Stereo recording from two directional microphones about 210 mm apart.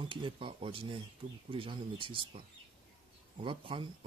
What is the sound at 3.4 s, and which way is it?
Speech, 25° right (ahead or behind).